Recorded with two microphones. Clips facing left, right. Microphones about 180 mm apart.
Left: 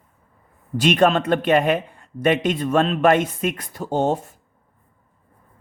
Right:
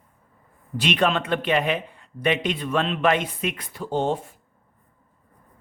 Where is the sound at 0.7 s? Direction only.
45° left (ahead or behind).